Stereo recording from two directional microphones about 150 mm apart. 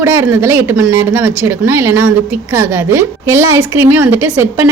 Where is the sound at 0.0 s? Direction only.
15° right (ahead or behind).